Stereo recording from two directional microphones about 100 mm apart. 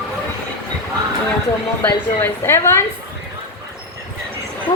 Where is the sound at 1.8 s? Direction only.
20° left (ahead or behind).